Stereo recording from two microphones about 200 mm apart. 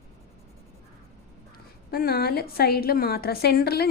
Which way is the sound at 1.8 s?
50° left (ahead or behind).